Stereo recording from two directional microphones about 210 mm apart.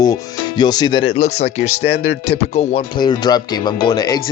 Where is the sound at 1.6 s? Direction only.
90° left.